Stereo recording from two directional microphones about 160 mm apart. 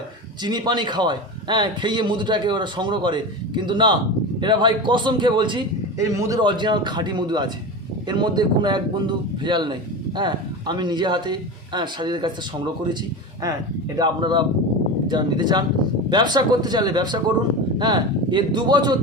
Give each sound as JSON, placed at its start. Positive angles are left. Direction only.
{"t": 0.4, "sound": "a man's voice", "side_deg": -25}
{"t": 13.4, "sound": "a man's voice", "side_deg": -20}